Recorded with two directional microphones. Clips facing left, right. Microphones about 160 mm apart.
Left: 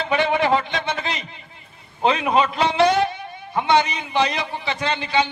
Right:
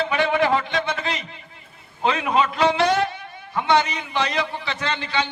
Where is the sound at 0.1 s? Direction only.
20° left (ahead or behind).